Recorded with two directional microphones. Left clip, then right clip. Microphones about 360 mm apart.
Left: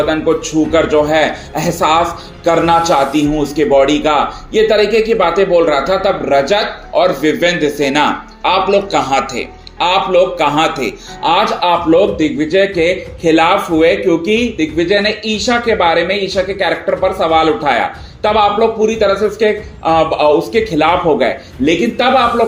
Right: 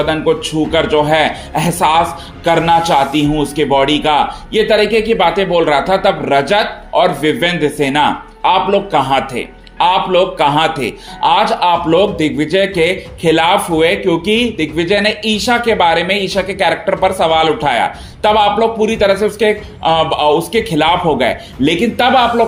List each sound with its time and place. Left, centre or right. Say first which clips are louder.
0.0 s speech: even; right